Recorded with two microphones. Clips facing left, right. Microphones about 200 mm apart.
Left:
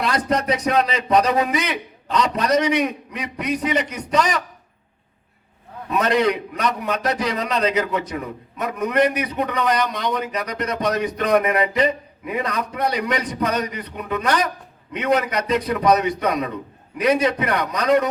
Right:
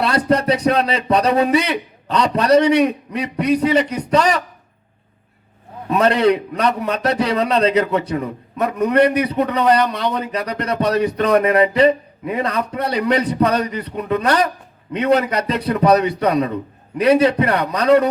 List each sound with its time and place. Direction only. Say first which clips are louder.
0.0 s speech: right 5 dB; 30° right (ahead or behind)
5.9 s speech: right 4 dB; 30° right (ahead or behind)